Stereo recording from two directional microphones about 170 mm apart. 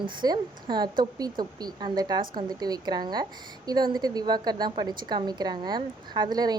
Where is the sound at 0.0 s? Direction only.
25° right (ahead or behind).